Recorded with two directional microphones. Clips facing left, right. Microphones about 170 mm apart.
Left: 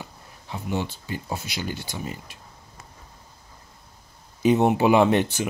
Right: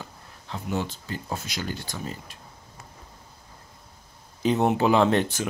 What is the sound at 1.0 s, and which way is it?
Speech, 10° left (ahead or behind).